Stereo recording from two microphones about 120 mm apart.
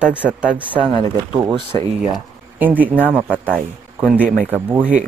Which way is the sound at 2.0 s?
10° right (ahead or behind).